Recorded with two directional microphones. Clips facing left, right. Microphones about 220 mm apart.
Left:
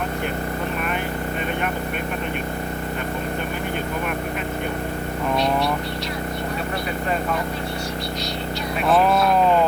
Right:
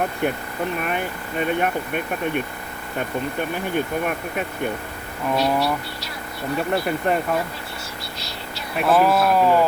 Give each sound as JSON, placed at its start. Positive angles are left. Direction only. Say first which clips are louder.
{"t": 5.4, "sound": "speech", "louder": "right 2 dB", "side_deg": -5}
{"t": 8.9, "sound": "speech", "louder": "right 1 dB", "side_deg": -5}